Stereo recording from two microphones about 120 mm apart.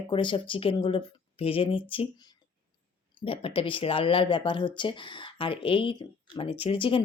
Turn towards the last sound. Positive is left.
turn(degrees=45)  # may be behind; listen again after turning